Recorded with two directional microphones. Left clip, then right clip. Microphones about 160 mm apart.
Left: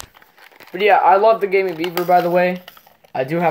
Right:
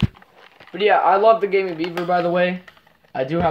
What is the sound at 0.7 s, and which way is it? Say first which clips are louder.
Speech: left 3 dB; 35° left (ahead or behind).